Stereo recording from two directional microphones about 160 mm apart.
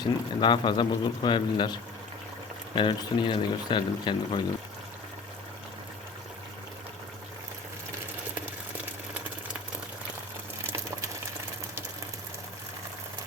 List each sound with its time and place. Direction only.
0.0 s speech: 30° left (ahead or behind)